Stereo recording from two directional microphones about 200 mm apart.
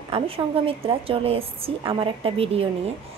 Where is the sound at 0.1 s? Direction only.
30° right (ahead or behind).